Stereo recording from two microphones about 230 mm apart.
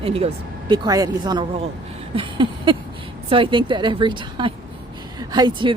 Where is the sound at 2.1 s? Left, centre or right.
Right.